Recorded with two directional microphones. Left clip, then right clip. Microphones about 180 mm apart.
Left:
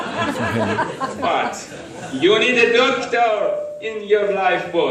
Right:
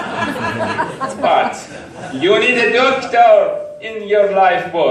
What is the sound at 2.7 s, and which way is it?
A man's voice, 45° right (ahead or behind).